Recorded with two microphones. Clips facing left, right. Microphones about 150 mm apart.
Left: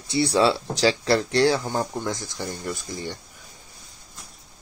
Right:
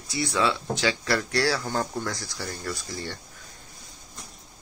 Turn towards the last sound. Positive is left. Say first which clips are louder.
# left 2 dB
turn(degrees=15)  # may be behind; listen again after turning